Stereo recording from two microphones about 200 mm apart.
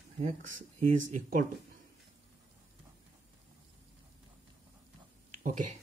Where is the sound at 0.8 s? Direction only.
40° right (ahead or behind).